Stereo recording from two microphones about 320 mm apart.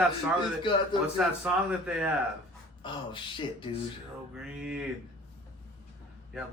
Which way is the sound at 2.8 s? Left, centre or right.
Centre.